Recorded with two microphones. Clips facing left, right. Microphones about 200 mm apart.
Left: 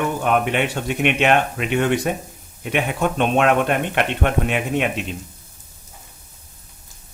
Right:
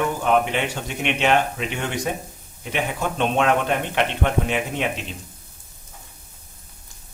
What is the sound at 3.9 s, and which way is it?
Speech, 55° left (ahead or behind).